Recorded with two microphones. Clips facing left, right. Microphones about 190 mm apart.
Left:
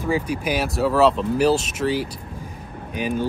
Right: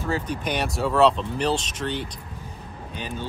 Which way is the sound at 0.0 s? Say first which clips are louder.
Left 4 dB; 10° left (ahead or behind).